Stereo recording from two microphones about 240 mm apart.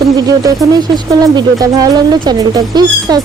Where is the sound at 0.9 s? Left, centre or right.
Centre.